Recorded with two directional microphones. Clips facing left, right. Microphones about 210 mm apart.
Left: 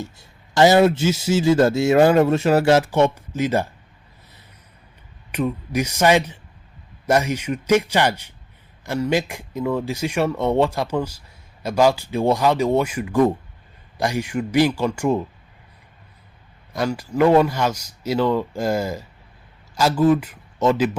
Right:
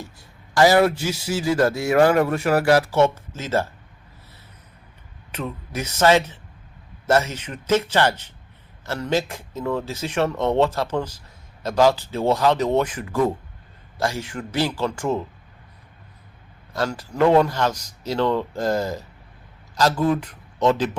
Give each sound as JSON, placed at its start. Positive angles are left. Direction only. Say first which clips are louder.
{"t": 0.0, "sound": "a man's voice", "louder": "left 5 dB", "side_deg": 25}
{"t": 5.3, "sound": "speech", "louder": "left 7 dB", "side_deg": 15}
{"t": 16.7, "sound": "speech", "louder": "left 3 dB", "side_deg": 10}